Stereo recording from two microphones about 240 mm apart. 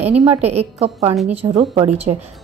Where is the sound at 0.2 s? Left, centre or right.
Right.